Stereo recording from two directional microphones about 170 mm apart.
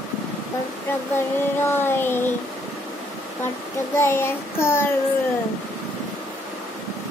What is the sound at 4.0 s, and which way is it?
Child singing, 15° left (ahead or behind).